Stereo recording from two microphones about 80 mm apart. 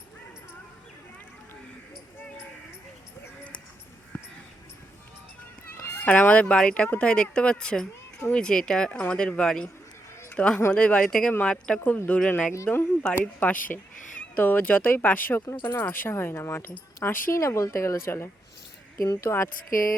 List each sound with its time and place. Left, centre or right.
5.7 s a sound: left
6.1 s speech: centre
17.3 s speech: left